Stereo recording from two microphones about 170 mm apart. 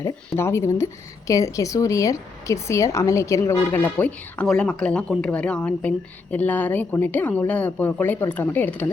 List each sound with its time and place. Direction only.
0.3 s speech: 15° left (ahead or behind)